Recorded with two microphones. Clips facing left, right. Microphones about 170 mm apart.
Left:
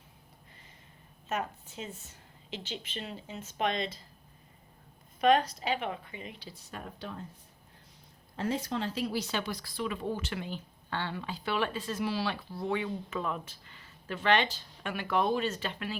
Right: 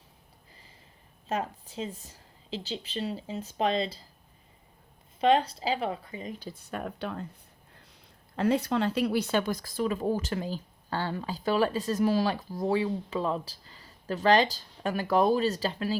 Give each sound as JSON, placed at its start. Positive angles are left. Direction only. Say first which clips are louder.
{"t": 1.3, "sound": "speech", "louder": "right 3 dB", "side_deg": -30}
{"t": 5.2, "sound": "speech", "louder": "right 2 dB", "side_deg": -30}
{"t": 8.4, "sound": "speech", "louder": "right 7 dB", "side_deg": -65}